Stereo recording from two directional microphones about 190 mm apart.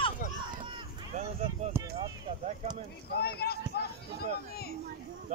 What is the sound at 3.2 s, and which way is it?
Speech, 55° left (ahead or behind).